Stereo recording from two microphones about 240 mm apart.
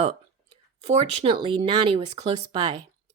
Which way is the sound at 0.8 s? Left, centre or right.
Right.